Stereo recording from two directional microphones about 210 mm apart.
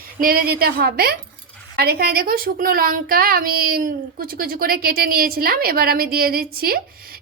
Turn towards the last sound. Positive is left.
turn(degrees=-45)  # may be behind; listen again after turning